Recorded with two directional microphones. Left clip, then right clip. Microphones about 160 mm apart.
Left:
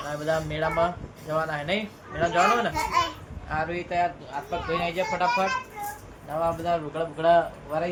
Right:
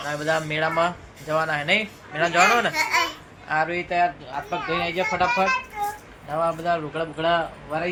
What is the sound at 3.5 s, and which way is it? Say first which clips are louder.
A man's voice: right 5 dB; 35° right (ahead or behind).